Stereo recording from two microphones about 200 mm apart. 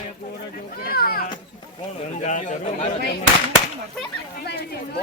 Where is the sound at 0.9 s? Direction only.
50° left (ahead or behind).